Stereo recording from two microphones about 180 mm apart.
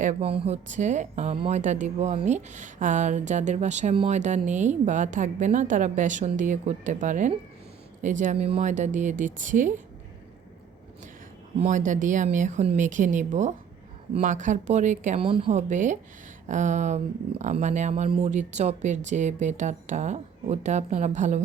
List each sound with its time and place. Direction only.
0.0 s a woman's voice: 40° right (ahead or behind)
11.6 s a woman's voice: 45° right (ahead or behind)
15.3 s speech: 30° right (ahead or behind)